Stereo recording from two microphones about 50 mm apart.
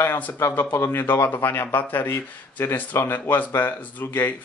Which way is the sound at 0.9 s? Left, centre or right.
Left.